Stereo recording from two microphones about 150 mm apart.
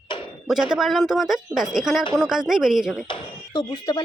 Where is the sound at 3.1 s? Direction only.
35° left (ahead or behind).